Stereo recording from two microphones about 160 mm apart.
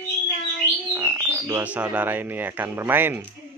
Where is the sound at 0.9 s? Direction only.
15° right (ahead or behind).